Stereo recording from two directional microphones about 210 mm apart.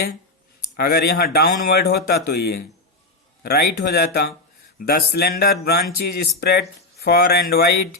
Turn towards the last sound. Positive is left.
turn(degrees=50)  # may be behind; listen again after turning